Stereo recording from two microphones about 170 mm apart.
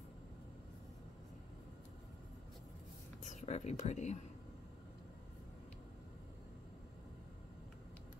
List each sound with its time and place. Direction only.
3.2 s speech: 45° left (ahead or behind)